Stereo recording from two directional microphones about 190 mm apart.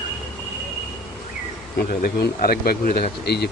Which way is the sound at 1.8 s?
50° left (ahead or behind).